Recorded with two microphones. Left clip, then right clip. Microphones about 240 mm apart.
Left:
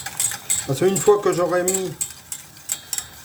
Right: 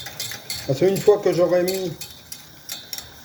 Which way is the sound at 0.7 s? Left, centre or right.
Left.